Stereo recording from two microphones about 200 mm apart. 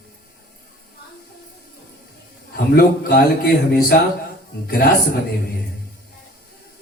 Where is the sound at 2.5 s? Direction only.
50° left (ahead or behind).